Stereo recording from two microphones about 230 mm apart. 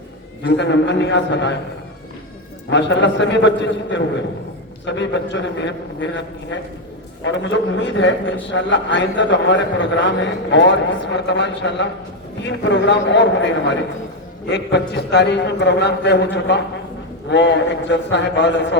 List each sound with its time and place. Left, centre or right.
0.4 s a man's voice: left
2.6 s a man's voice: left
7.3 s a man's voice: left